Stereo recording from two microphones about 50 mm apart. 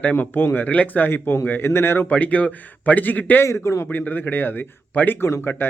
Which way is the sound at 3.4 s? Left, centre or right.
Left.